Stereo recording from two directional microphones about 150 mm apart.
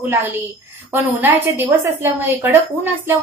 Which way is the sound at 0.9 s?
15° right (ahead or behind).